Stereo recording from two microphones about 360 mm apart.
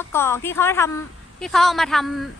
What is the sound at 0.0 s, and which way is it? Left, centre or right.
A woman's voice, centre.